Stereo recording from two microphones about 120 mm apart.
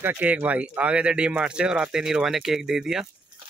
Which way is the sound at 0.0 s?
15° right (ahead or behind).